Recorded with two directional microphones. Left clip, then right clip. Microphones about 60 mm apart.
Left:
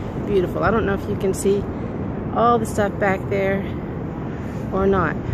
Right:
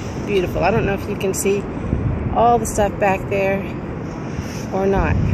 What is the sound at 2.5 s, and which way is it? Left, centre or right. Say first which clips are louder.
Speech: right 3 dB; centre.